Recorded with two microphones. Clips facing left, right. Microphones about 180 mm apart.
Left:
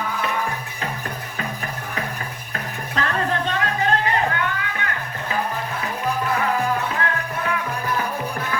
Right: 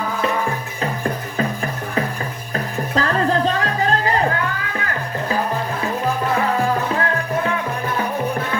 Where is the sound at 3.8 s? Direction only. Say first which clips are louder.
Right 2 dB; 35° right (ahead or behind).